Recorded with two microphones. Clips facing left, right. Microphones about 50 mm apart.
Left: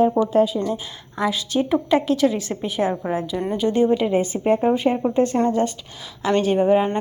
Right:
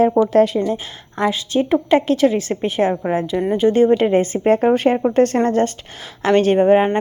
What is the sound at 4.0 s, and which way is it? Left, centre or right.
Speech, right.